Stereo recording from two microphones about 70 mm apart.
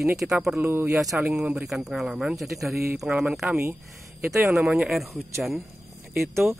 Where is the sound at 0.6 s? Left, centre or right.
Right.